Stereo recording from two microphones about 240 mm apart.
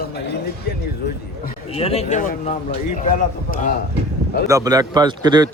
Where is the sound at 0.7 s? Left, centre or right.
Left.